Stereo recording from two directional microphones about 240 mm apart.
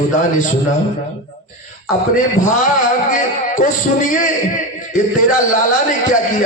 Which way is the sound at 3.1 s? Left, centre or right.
Left.